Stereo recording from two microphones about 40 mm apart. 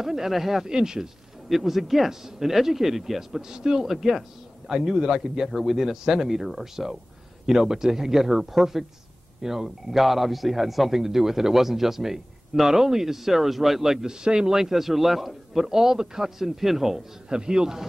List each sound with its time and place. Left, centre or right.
0.0 s a man's voice: centre
1.5 s a man's voice: centre
14.0 s a man's voice: centre
17.3 s a man's voice: centre